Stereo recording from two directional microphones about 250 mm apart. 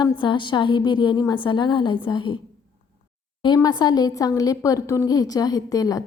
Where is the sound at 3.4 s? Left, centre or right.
Centre.